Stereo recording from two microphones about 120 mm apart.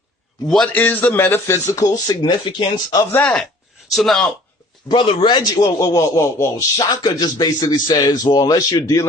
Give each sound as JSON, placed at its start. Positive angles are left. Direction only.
{"t": 0.4, "sound": "speech", "side_deg": 5}
{"t": 0.7, "sound": "speech", "side_deg": 15}
{"t": 3.0, "sound": "speech", "side_deg": 15}
{"t": 3.9, "sound": "speech", "side_deg": 5}
{"t": 4.9, "sound": "a man's voice", "side_deg": 40}